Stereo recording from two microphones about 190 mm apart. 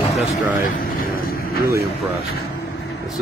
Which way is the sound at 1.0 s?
50° left (ahead or behind).